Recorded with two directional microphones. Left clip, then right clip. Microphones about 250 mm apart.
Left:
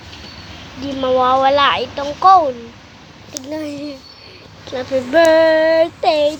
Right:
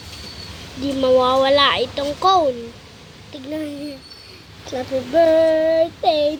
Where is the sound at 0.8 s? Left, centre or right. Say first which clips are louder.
Even; centre.